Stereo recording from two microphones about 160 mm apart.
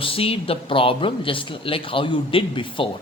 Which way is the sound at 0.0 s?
35° left (ahead or behind).